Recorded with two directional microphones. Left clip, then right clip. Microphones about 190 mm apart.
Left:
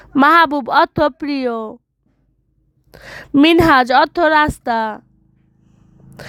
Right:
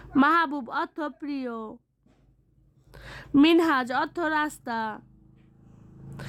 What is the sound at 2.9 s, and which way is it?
A woman's voice, 40° left (ahead or behind).